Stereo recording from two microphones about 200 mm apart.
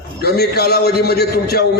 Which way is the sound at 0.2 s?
50° left (ahead or behind).